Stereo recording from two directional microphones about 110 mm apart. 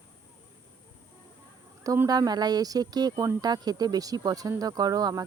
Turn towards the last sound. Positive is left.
turn(degrees=-35)  # may be behind; listen again after turning